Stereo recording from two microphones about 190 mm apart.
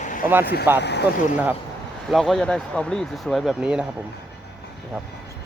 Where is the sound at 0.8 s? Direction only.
60° left (ahead or behind).